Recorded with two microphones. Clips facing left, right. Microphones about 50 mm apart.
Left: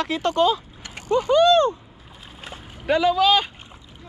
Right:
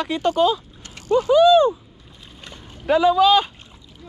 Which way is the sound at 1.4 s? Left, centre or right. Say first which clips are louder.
Right 4 dB; centre.